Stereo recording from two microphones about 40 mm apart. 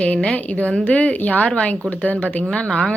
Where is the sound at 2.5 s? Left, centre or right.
Left.